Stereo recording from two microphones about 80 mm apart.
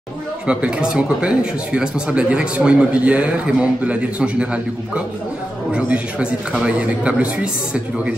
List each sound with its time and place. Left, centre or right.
0.5 s speech: centre
5.7 s speech: centre